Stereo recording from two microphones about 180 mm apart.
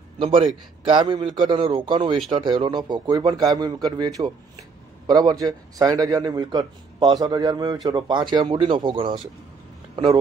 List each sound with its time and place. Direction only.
0.2 s a man's voice: 30° right (ahead or behind)